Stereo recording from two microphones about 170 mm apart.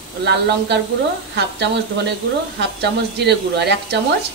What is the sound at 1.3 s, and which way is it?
Speech, 90° right.